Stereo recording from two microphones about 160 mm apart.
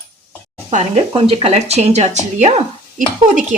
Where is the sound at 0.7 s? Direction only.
45° right (ahead or behind).